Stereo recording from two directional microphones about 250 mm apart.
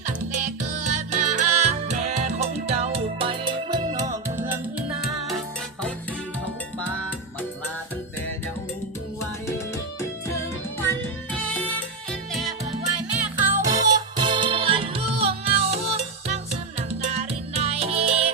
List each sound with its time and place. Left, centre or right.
0.0 s music: right; by 4.6 s centre
13.4 s music: centre